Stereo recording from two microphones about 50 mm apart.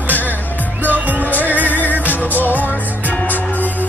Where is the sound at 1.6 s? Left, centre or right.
Left.